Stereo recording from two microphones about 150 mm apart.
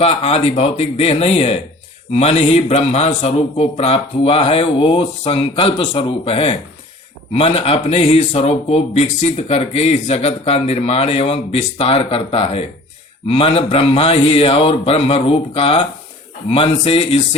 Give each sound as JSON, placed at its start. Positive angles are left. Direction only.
{"t": 0.0, "sound": "a man's voice", "side_deg": 45}